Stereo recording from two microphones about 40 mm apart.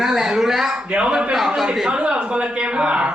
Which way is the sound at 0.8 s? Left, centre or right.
Right.